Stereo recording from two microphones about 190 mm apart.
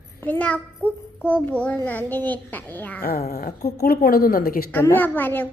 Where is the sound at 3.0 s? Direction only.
50° left (ahead or behind).